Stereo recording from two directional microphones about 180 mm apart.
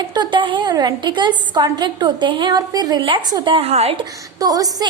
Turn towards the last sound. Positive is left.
turn(degrees=-20)  # may be behind; listen again after turning